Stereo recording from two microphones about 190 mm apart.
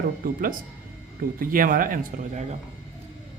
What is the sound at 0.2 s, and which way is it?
Speech, 50° right (ahead or behind).